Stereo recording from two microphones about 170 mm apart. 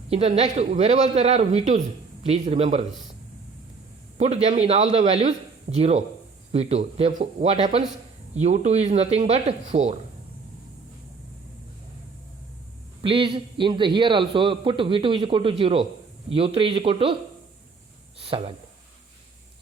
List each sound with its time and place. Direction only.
0.1 s a man's voice: 35° right (ahead or behind)
4.2 s a man's voice: 40° right (ahead or behind)
13.0 s a man's voice: 30° right (ahead or behind)
18.2 s speech: 35° right (ahead or behind)